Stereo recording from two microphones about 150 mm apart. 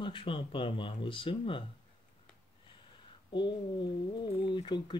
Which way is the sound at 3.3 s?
30° left (ahead or behind).